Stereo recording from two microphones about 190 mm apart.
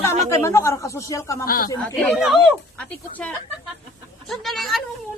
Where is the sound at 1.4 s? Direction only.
50° left (ahead or behind).